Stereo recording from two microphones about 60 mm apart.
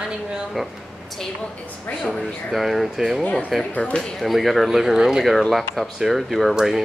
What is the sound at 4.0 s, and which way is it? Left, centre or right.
Speech, centre.